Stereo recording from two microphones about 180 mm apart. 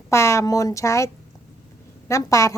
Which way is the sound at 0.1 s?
15° left (ahead or behind).